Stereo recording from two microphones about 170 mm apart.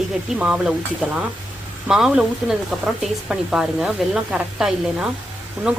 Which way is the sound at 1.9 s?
5° right (ahead or behind).